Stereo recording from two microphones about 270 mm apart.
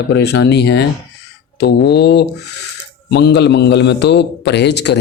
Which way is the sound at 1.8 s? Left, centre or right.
Left.